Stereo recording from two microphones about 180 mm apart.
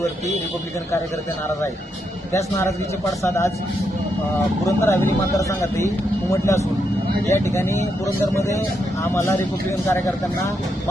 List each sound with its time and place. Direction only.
2.3 s speech: 15° left (ahead or behind)
4.6 s speech: 15° left (ahead or behind)